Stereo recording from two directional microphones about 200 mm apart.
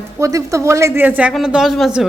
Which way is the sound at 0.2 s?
15° right (ahead or behind).